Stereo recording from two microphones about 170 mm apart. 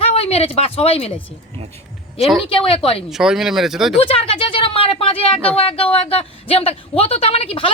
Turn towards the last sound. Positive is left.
turn(degrees=35)  # may be behind; listen again after turning